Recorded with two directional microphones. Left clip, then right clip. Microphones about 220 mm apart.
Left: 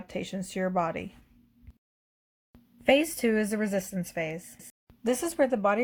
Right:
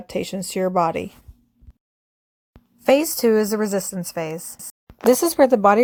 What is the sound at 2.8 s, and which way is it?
A woman's voice, 20° right (ahead or behind).